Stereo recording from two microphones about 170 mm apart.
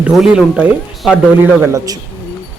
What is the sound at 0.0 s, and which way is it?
Speech, 5° right (ahead or behind).